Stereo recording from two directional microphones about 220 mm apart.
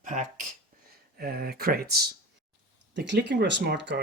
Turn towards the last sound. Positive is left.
turn(degrees=-50)  # may be behind; listen again after turning